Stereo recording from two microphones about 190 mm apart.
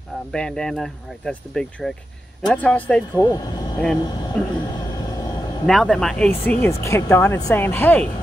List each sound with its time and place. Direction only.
0.3 s speech: 5° left (ahead or behind)
3.2 s speech: 20° left (ahead or behind)
4.0 s a sound: 20° left (ahead or behind)
5.7 s speech: centre (ahead or behind)
6.8 s speech: 15° left (ahead or behind)